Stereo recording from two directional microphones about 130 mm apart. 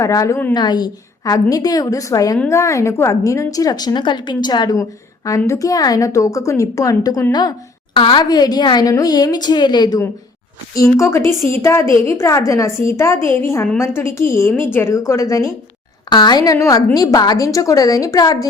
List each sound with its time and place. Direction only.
0.0 s a woman's voice: 25° left (ahead or behind)
0.5 s a woman's voice: 35° left (ahead or behind)
10.8 s a woman's voice: 20° left (ahead or behind)
16.0 s a woman's voice: 35° left (ahead or behind)